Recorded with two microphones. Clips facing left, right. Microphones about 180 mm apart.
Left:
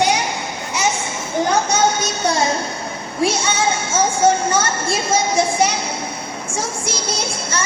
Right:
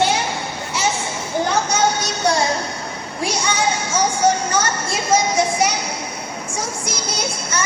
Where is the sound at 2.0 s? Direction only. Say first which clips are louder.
Even; 20° left (ahead or behind).